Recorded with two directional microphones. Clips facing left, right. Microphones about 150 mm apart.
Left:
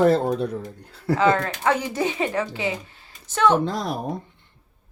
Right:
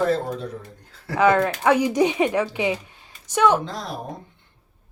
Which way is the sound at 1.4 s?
15° right (ahead or behind).